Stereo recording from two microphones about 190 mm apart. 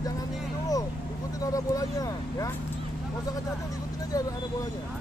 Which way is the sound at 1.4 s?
20° left (ahead or behind).